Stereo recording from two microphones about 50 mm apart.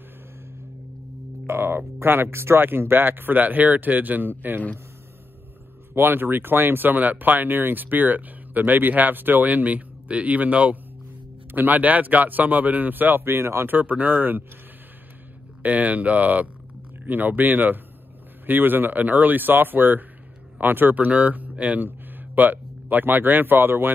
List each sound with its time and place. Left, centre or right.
1.5 s speech: right
5.9 s speech: right
13.2 s speech: right
13.7 s speech: right
15.6 s speech: right